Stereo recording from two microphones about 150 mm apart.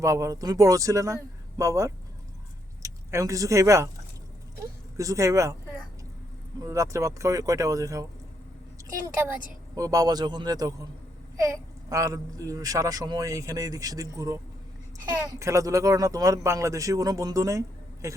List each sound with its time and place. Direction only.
0.0 s speech: 20° right (ahead or behind)
4.9 s speech: 20° right (ahead or behind)
6.6 s speech: 20° right (ahead or behind)
9.7 s speech: 25° right (ahead or behind)